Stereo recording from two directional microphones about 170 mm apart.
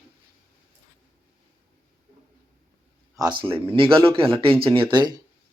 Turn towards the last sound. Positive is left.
turn(degrees=-25)  # may be behind; listen again after turning